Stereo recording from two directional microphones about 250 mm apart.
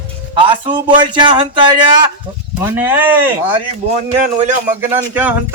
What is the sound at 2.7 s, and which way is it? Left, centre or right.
Speech, centre.